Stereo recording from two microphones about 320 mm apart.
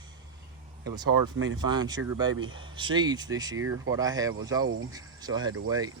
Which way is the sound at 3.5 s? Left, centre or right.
Right.